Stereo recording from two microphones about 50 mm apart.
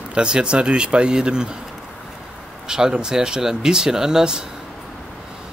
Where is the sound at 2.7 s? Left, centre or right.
Centre.